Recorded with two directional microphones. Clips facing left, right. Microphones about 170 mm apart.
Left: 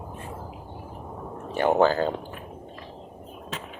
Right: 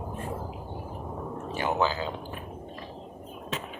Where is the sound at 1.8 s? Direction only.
55° left (ahead or behind).